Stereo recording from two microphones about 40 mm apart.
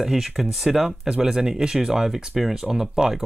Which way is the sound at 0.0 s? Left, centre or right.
Centre.